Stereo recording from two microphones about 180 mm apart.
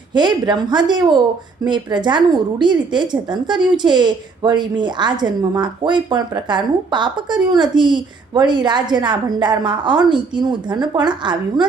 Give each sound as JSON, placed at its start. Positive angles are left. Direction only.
{"t": 0.1, "sound": "a woman's voice", "side_deg": -25}